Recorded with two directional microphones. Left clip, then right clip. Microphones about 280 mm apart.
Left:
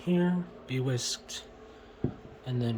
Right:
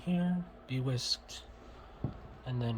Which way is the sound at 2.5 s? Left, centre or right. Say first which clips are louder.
Left 5 dB; centre.